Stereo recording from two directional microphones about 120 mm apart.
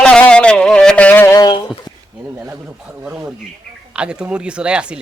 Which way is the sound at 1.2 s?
25° left (ahead or behind).